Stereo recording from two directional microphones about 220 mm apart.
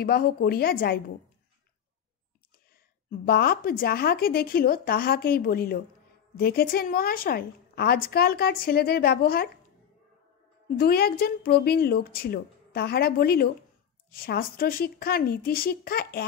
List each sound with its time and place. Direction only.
0.0 s a woman's voice: 45° left (ahead or behind)
3.1 s a woman's voice: 45° left (ahead or behind)
10.8 s a woman's voice: 45° left (ahead or behind)